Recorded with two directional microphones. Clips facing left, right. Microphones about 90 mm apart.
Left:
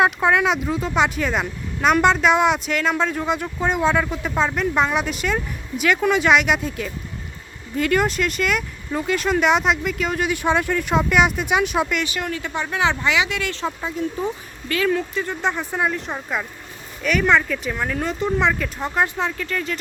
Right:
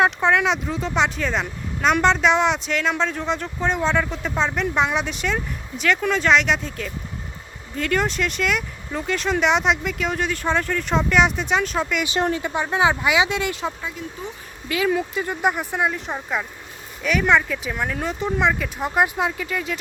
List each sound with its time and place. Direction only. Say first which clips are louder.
0.0 s speech: left 1 dB; 5° left (ahead or behind)
10.3 s speech: left 2 dB; 10° left (ahead or behind)
12.0 s speech: right 4 dB; 25° right (ahead or behind)
14.7 s speech: even; 10° right (ahead or behind)